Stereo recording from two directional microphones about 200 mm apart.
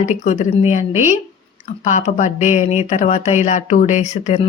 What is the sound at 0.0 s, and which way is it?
Speech, 35° left (ahead or behind).